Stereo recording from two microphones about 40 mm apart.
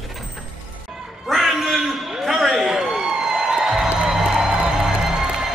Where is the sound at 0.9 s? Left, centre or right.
Centre.